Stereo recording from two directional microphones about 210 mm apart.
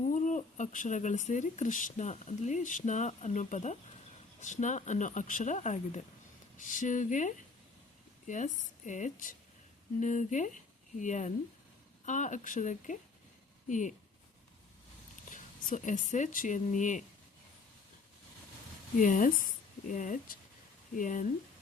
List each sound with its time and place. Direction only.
0.1 s speech: 35° left (ahead or behind)
8.9 s speech: 35° left (ahead or behind)
15.3 s speech: 35° left (ahead or behind)
18.9 s speech: 40° left (ahead or behind)